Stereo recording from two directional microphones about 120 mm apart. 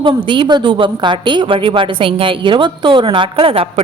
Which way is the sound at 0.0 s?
45° right (ahead or behind).